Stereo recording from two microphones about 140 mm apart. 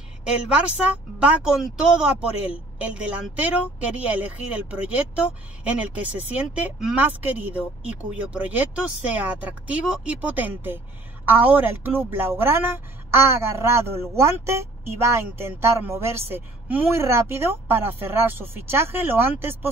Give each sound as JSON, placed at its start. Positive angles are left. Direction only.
{"t": 0.2, "sound": "a woman's voice", "side_deg": -5}